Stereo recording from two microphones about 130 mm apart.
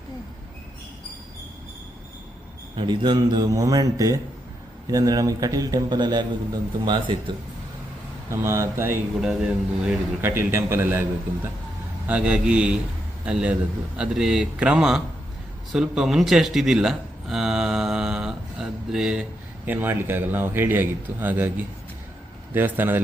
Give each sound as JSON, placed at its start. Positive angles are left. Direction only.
{"t": 2.7, "sound": "a man's voice", "side_deg": -35}
{"t": 8.3, "sound": "a man's voice", "side_deg": -20}
{"t": 9.2, "sound": "speech", "side_deg": -5}
{"t": 10.2, "sound": "speech", "side_deg": -20}
{"t": 12.0, "sound": "speech", "side_deg": -10}
{"t": 22.5, "sound": "speech", "side_deg": -15}